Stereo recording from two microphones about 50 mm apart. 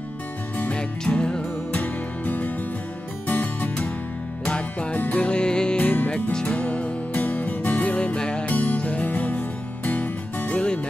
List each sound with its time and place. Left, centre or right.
0.7 s music: centre
1.8 s music: left
5.3 s music: centre
5.8 s music: left
8.0 s music: left
8.5 s music: left